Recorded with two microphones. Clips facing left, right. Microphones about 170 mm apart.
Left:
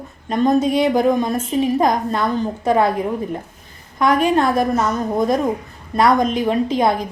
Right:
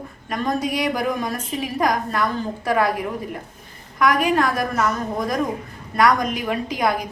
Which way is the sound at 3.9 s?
25° left (ahead or behind).